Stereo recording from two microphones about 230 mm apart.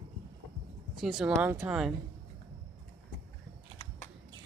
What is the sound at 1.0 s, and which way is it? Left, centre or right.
Speech, centre.